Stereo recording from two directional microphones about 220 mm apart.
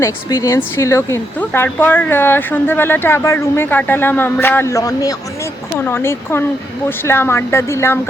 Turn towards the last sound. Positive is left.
turn(degrees=10)  # may be behind; listen again after turning